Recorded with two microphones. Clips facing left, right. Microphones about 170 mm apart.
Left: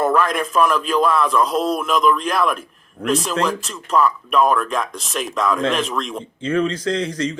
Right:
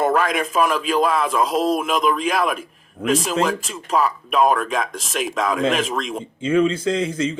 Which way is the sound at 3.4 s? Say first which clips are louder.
Even; 45° right (ahead or behind).